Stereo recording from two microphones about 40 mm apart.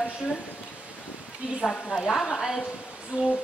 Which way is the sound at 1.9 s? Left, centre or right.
Centre.